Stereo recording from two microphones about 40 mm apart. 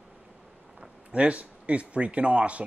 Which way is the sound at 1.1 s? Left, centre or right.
Right.